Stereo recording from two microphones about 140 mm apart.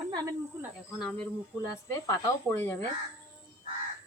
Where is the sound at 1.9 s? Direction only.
20° left (ahead or behind).